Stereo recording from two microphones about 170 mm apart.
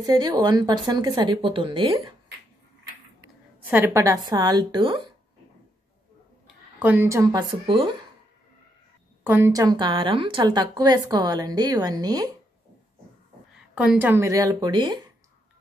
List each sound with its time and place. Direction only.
0.0 s a woman's voice: 25° right (ahead or behind)
3.7 s a woman's voice: 15° right (ahead or behind)
6.8 s a woman's voice: 10° right (ahead or behind)
9.2 s a woman's voice: 15° right (ahead or behind)
13.7 s a woman's voice: 10° right (ahead or behind); by 15.0 s 25° right (ahead or behind)